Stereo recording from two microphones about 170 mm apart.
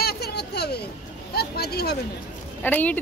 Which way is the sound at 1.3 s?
70° left (ahead or behind).